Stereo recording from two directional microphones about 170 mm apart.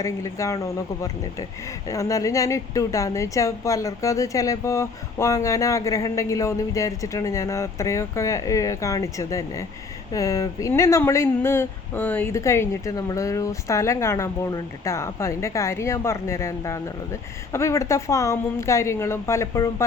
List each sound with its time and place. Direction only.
0.0 s speech: 20° left (ahead or behind)